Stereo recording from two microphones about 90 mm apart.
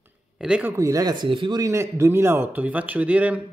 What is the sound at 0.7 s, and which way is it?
Speech, 35° right (ahead or behind).